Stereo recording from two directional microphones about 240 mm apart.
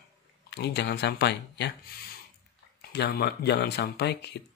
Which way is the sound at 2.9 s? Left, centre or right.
Left.